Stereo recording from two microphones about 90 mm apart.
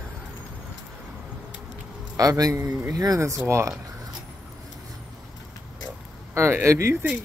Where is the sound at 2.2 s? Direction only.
45° right (ahead or behind).